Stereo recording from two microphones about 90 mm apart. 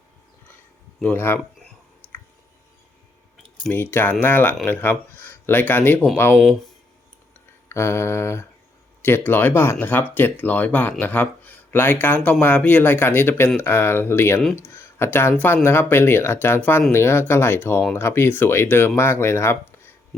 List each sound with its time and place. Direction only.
1.0 s speech: 25° left (ahead or behind)
4.2 s speech: 20° left (ahead or behind)
7.7 s speech: 30° left (ahead or behind)